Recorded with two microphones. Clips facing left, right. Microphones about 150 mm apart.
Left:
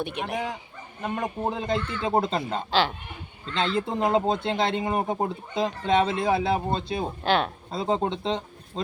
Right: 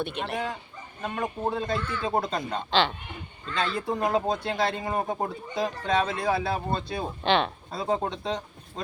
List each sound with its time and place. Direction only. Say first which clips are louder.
0.0 s speech: left 1 dB; 15° left (ahead or behind)
7.3 s speech: even; 5° left (ahead or behind)
7.7 s speech: left 5 dB; 20° left (ahead or behind)